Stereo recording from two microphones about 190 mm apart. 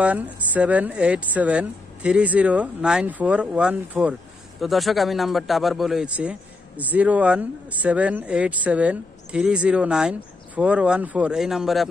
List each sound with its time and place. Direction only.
0.0 s speech: 10° right (ahead or behind)